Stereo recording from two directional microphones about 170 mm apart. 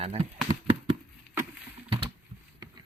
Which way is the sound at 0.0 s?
35° right (ahead or behind).